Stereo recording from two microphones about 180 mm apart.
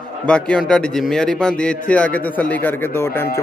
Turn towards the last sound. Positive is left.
turn(degrees=15)  # may be behind; listen again after turning